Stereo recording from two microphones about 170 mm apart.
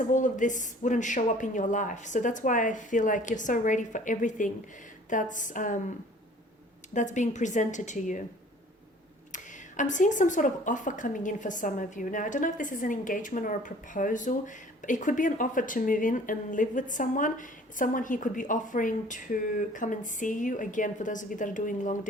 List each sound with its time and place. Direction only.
0.1 s speech: 50° left (ahead or behind)
6.9 s speech: 45° left (ahead or behind)
9.3 s speech: 45° left (ahead or behind)